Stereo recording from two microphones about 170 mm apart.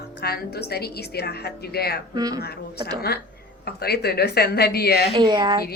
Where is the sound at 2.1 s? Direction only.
20° right (ahead or behind).